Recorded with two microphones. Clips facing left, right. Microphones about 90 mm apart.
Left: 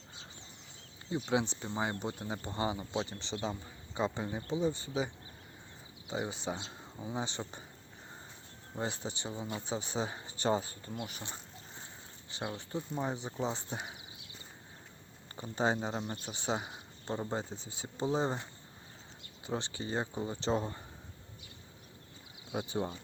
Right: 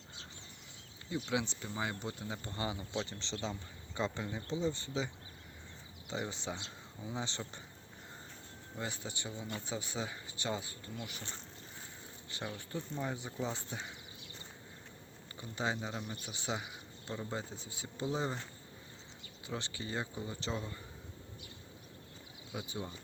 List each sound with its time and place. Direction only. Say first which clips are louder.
1.1 s speech: left 4 dB; 30° left (ahead or behind)
3.2 s speech: left 3 dB; 15° left (ahead or behind)
4.2 s speech: left 3 dB; 25° left (ahead or behind)
4.6 s speech: left 3 dB; 15° left (ahead or behind)
6.1 s speech: left 3 dB; 15° left (ahead or behind)
8.7 s speech: left 4 dB; 30° left (ahead or behind)
12.3 s speech: left 3 dB; 20° left (ahead or behind)
15.4 s speech: left 5 dB; 35° left (ahead or behind)
19.5 s speech: left 4 dB; 25° left (ahead or behind)
22.5 s speech: left 7 dB; 45° left (ahead or behind)